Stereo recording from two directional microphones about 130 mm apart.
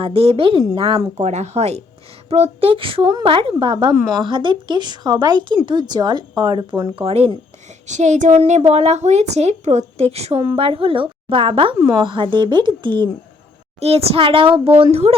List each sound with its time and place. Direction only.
0.0 s a woman's voice: 45° right (ahead or behind)
1.2 s a woman's voice: 60° right (ahead or behind); by 6.9 s 30° right (ahead or behind)
6.9 s a woman's voice: 50° right (ahead or behind)
7.9 s a woman's voice: 65° right (ahead or behind); by 13.1 s 35° right (ahead or behind)
13.7 s a woman's voice: 50° right (ahead or behind)